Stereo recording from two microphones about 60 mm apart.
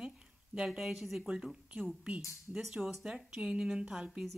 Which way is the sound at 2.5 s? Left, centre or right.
Centre.